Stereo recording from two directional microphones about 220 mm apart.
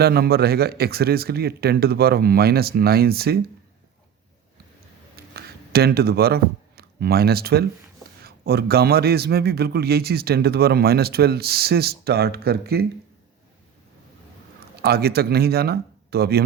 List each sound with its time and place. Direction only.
0.0 s a man's voice: 45° right (ahead or behind)
5.1 s a sound: 45° right (ahead or behind)
8.2 s a man's voice: 45° right (ahead or behind)
14.8 s a man's voice: 45° right (ahead or behind)